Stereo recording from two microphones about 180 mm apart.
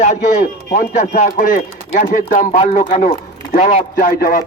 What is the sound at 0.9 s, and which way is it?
Speech, 40° left (ahead or behind).